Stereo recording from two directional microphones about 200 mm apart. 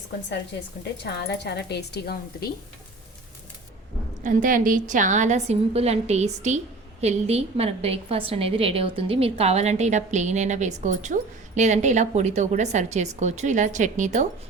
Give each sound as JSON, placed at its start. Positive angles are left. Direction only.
{"t": 1.0, "sound": "a woman's voice", "side_deg": 60}
{"t": 4.2, "sound": "a woman's voice", "side_deg": -40}